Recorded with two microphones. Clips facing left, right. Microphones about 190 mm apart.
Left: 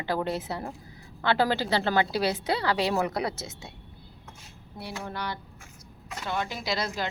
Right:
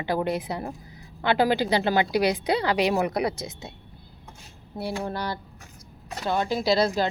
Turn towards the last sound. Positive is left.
turn(degrees=-35)  # may be behind; listen again after turning